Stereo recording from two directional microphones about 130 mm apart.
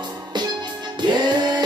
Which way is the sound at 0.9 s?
35° right (ahead or behind).